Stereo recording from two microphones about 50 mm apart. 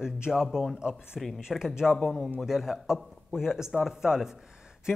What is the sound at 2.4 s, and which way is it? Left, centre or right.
Speech, centre.